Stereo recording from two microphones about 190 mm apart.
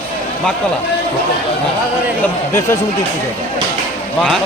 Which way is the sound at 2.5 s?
15° left (ahead or behind).